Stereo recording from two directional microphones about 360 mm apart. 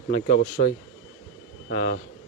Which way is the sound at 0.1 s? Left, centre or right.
Left.